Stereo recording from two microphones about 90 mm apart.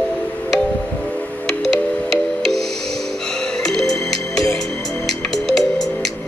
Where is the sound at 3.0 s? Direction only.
5° left (ahead or behind).